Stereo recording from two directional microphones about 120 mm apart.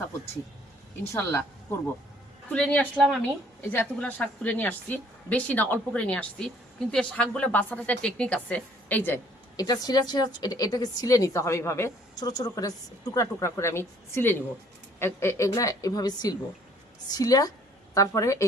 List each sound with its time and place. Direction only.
1.1 s a woman's voice: 20° left (ahead or behind)
2.5 s a woman's voice: 10° left (ahead or behind)
3.2 s a woman's voice: 15° left (ahead or behind)
9.6 s a woman's voice: 30° left (ahead or behind)
12.1 s a woman's voice: 35° left (ahead or behind)